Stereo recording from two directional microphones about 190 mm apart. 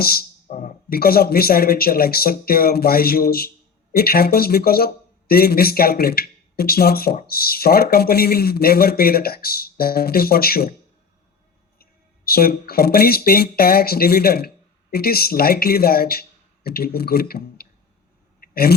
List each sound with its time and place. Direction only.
0.0 s speech: 55° left (ahead or behind)
11.8 s speech: 50° left (ahead or behind)
18.3 s a sound: 55° left (ahead or behind)